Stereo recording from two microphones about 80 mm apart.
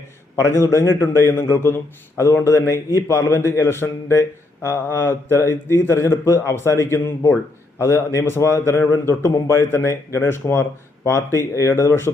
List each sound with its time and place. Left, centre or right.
0.4 s a man's voice: left